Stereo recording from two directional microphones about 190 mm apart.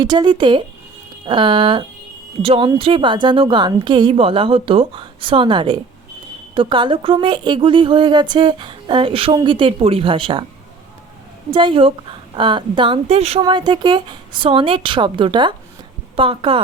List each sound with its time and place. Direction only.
0.0 s a woman's voice: 25° right (ahead or behind)
11.5 s a woman's voice: 25° right (ahead or behind)